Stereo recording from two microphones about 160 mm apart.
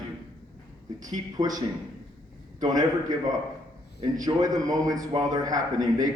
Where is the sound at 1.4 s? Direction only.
25° right (ahead or behind).